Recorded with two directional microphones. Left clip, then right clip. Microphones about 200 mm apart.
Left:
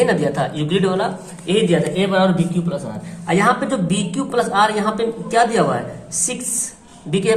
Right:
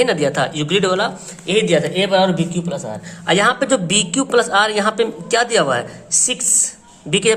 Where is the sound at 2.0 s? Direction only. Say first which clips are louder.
Right 2 dB; 55° right (ahead or behind).